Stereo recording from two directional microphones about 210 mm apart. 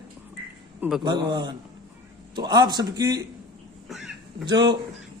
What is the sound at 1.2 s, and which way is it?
A man's voice, 20° right (ahead or behind).